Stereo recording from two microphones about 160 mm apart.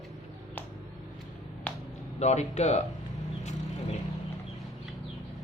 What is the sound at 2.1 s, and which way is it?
Speech, 45° left (ahead or behind).